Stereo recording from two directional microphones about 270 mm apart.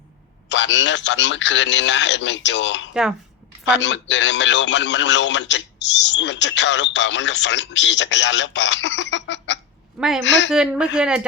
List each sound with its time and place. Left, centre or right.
0.4 s a man's voice: left
2.9 s speech: centre
3.7 s a man's voice: left
10.0 s speech: centre
10.2 s a man's voice: left
10.5 s speech: centre